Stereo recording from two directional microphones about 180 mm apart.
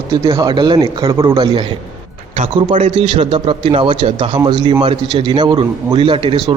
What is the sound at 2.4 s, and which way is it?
A man's voice, 30° right (ahead or behind).